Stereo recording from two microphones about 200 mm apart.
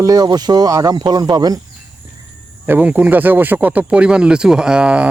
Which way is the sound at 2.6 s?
10° right (ahead or behind).